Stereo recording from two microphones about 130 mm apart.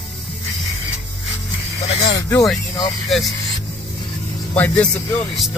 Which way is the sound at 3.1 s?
Centre (ahead or behind).